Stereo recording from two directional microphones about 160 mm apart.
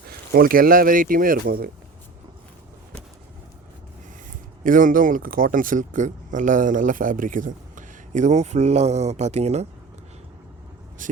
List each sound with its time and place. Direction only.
0.1 s speech: 65° right (ahead or behind)
4.3 s speech: 55° right (ahead or behind)
11.0 s speech: 55° right (ahead or behind)